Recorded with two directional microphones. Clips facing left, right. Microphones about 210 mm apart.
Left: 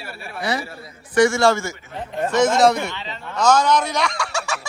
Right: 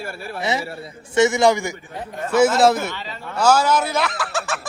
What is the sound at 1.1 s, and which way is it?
A man's voice, 20° right (ahead or behind).